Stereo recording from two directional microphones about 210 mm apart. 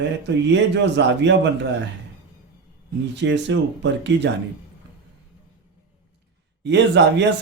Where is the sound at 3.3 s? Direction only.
60° right (ahead or behind).